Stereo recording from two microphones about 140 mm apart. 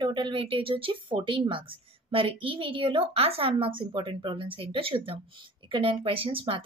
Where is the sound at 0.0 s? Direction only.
35° right (ahead or behind).